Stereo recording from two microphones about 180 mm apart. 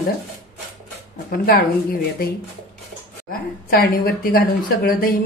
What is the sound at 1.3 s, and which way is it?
Speech, 55° left (ahead or behind).